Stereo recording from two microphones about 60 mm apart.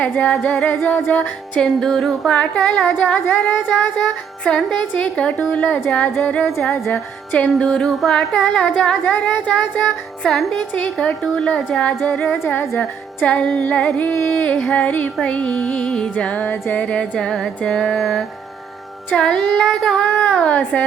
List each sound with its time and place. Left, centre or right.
0.0 s music: left
1.5 s a woman's voice: centre
3.2 s child singing: left
4.0 s a woman's voice: centre
5.5 s music: left
7.6 s a woman's voice: centre
7.9 s carnatic music: centre
8.4 s a woman's voice: centre
9.1 s music: centre
10.2 s carnatic music: centre
10.6 s a woman's voice: centre
12.5 s child singing: left
13.2 s music: centre
16.8 s a woman's voice: centre